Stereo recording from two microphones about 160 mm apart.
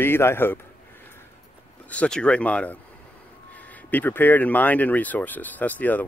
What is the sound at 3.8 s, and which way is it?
Speech, 10° left (ahead or behind).